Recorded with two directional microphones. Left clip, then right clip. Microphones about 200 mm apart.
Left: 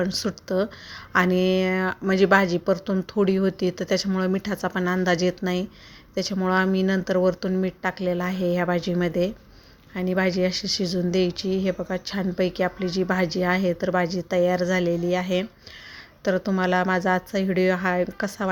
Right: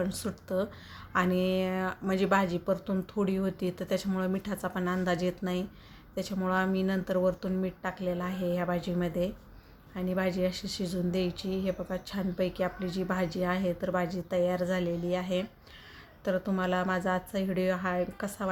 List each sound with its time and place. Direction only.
0.0 s a woman's voice: 30° left (ahead or behind)